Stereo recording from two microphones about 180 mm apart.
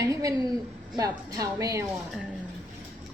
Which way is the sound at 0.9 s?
20° right (ahead or behind).